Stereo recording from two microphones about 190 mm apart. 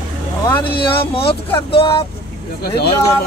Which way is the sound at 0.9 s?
30° left (ahead or behind).